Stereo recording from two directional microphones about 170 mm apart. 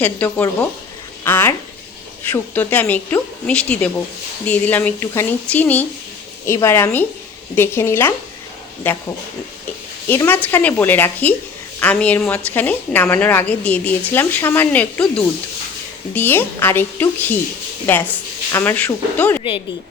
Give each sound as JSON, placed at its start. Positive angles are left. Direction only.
{"t": 0.0, "sound": "a woman's voice", "side_deg": 10}
{"t": 10.1, "sound": "a woman's voice", "side_deg": 10}
{"t": 16.1, "sound": "a woman's voice", "side_deg": 10}
{"t": 19.4, "sound": "speech", "side_deg": 30}